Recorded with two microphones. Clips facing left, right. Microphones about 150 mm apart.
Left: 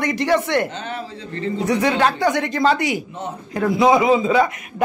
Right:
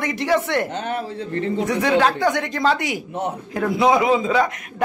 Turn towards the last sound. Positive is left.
turn(degrees=5)  # may be behind; listen again after turning